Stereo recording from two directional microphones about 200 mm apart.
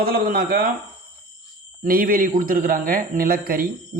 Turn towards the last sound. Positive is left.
turn(degrees=-45)  # may be behind; listen again after turning